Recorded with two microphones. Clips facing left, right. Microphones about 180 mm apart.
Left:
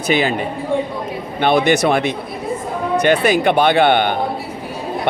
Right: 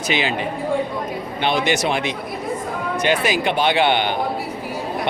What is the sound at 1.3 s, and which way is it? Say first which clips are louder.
Speech: left 6 dB; 55° left (ahead or behind).